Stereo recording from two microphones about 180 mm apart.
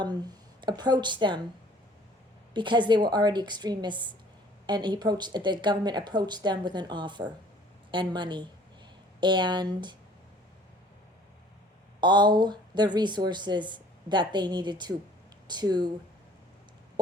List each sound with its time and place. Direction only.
0.0 s speech: 25° right (ahead or behind)
2.5 s speech: 25° right (ahead or behind)
11.9 s speech: 25° right (ahead or behind)